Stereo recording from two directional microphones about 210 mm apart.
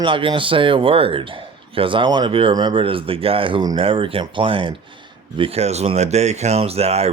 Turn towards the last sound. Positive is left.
turn(degrees=-30)  # may be behind; listen again after turning